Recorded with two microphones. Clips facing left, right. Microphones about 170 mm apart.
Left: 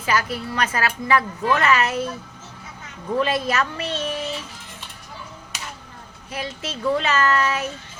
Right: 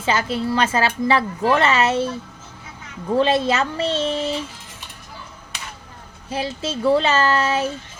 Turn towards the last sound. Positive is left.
turn(degrees=-30)  # may be behind; listen again after turning